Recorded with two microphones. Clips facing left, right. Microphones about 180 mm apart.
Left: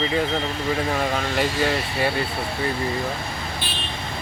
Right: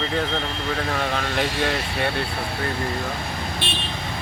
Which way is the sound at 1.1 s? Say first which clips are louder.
Left 1 dB; centre (ahead or behind).